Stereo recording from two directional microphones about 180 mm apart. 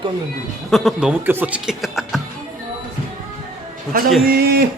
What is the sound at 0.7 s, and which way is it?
Speech, centre (ahead or behind).